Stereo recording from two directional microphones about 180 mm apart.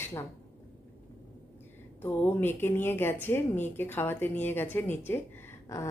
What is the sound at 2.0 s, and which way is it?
Speech, 10° left (ahead or behind).